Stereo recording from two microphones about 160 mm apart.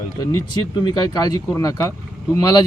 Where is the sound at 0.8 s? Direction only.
25° left (ahead or behind).